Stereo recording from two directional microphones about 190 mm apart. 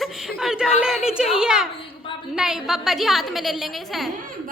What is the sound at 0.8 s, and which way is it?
A woman's voice, 5° right (ahead or behind).